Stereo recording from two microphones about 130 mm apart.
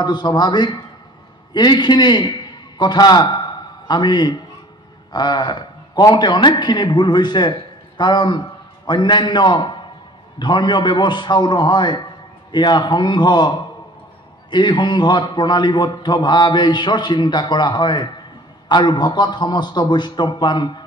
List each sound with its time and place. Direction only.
0.0 s a man's voice: 35° left (ahead or behind)